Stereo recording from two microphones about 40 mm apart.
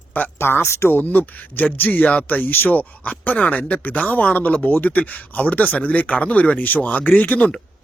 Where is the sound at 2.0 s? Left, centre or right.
Left.